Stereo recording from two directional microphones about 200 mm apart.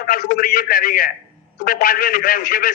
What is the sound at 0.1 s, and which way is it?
A man's voice, 45° left (ahead or behind).